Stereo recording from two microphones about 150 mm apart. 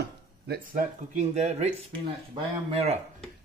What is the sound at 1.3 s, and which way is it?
Speech, 50° right (ahead or behind).